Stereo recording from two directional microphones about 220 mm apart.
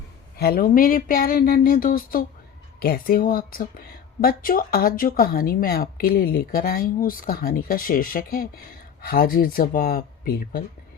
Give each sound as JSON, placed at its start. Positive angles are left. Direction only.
{"t": 0.3, "sound": "speech", "side_deg": 45}